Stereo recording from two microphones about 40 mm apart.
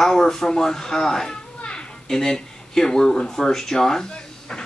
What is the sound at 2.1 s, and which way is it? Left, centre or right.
Speech, centre.